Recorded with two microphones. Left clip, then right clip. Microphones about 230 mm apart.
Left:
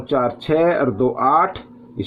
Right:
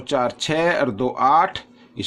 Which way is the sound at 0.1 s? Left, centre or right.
Right.